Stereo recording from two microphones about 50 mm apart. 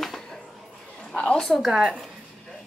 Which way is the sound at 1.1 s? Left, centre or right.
Left.